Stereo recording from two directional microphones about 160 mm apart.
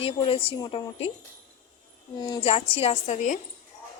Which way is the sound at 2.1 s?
25° left (ahead or behind).